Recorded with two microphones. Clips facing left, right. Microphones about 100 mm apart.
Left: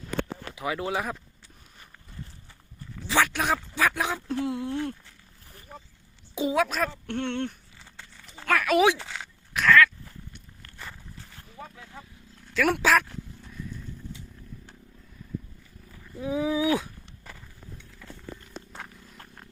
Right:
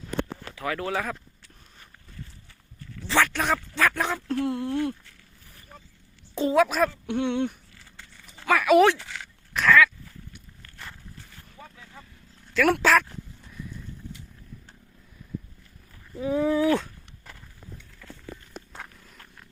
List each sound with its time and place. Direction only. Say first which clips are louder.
0.5 s speech: right 1 dB; 15° left (ahead or behind)
3.0 s speech: right 1 dB; 5° left (ahead or behind)
6.3 s speech: right 4 dB; 5° left (ahead or behind)
8.1 s a sound: right 2 dB; centre (ahead or behind)
8.9 s a sound: even; 10° left (ahead or behind)
11.6 s vehicle: left 4 dB; 10° left (ahead or behind)
12.5 s speech: right 2 dB; centre (ahead or behind)
16.1 s a sound: right 3 dB; centre (ahead or behind)
18.7 s vehicle: even; centre (ahead or behind)
19.1 s purr: left 3 dB; 35° left (ahead or behind)